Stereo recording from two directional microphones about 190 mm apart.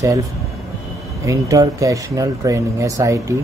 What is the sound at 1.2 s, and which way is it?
Speech, 15° right (ahead or behind).